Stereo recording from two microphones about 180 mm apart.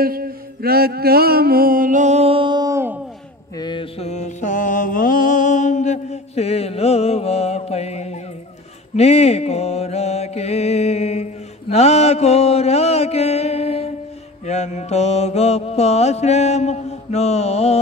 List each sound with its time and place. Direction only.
0.0 s music: 55° right (ahead or behind); by 3.0 s 15° right (ahead or behind)
3.5 s mantra: 25° left (ahead or behind)